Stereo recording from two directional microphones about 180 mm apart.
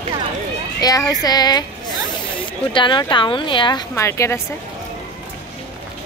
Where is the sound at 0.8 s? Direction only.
20° left (ahead or behind).